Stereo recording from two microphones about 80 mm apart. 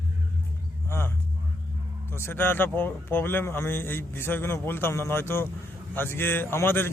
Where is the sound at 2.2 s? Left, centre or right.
Left.